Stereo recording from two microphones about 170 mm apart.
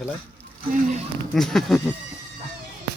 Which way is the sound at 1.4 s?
Centre (ahead or behind).